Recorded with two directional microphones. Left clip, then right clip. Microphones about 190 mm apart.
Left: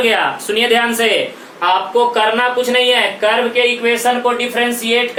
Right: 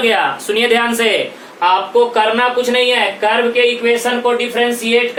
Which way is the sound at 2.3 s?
20° right (ahead or behind).